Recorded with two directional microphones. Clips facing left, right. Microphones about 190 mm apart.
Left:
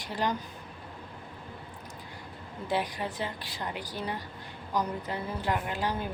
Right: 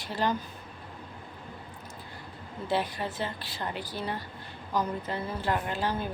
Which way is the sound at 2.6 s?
15° left (ahead or behind).